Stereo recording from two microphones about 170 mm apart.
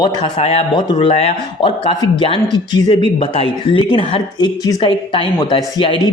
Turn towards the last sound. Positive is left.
turn(degrees=30)  # may be behind; listen again after turning